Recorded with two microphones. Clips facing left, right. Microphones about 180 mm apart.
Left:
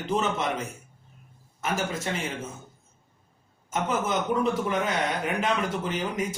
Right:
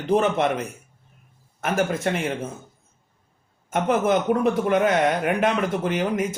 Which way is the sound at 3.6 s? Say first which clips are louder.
Right 7 dB; 60° right (ahead or behind).